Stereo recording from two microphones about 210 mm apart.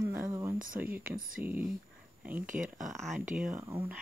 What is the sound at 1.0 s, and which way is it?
Speech, 40° right (ahead or behind).